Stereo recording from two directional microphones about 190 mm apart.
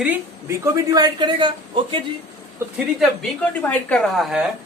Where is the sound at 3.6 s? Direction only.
10° left (ahead or behind).